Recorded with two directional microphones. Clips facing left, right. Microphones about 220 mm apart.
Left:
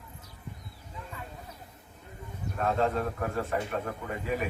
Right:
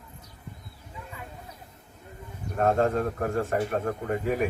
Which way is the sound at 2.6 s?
45° right (ahead or behind).